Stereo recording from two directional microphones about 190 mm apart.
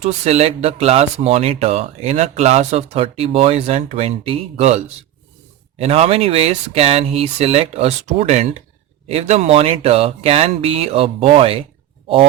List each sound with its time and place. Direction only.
0.0 s speech: 35° right (ahead or behind)
5.8 s speech: 30° right (ahead or behind)